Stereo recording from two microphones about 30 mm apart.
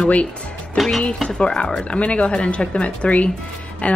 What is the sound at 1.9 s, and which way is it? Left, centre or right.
Speech, left.